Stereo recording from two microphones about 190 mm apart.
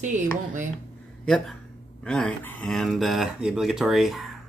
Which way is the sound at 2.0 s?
5° left (ahead or behind).